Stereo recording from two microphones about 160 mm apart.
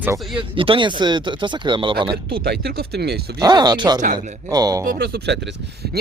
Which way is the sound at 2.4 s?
90° right.